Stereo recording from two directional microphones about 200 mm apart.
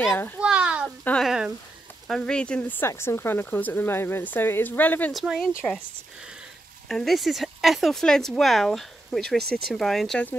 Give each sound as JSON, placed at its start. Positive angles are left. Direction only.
{"t": 0.0, "sound": "a child's voice", "side_deg": 10}
{"t": 0.4, "sound": "a sound", "side_deg": -5}
{"t": 1.0, "sound": "speech", "side_deg": 0}
{"t": 5.2, "sound": "speech", "side_deg": 0}
{"t": 6.9, "sound": "speech", "side_deg": 0}